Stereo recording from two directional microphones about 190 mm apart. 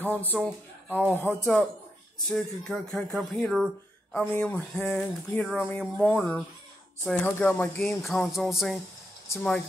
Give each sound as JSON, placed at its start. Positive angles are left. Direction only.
{"t": 0.0, "sound": "speech", "side_deg": 10}